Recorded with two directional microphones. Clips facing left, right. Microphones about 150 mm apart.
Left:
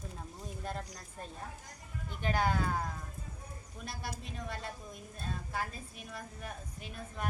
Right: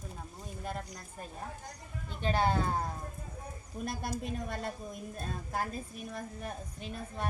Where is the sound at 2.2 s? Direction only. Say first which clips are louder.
Right 2 dB; 25° right (ahead or behind).